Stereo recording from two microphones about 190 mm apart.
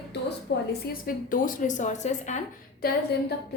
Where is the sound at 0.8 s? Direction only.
50° left (ahead or behind).